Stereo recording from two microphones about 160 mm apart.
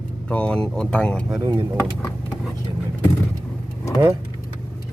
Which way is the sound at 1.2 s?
15° right (ahead or behind).